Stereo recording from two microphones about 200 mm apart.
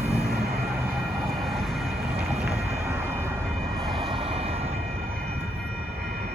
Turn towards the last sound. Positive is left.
turn(degrees=-30)  # may be behind; listen again after turning